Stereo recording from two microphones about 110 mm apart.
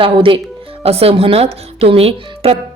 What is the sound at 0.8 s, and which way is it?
A woman's voice, 65° right (ahead or behind).